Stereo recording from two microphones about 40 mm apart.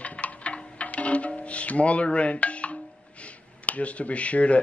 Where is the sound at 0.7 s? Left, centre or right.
Left.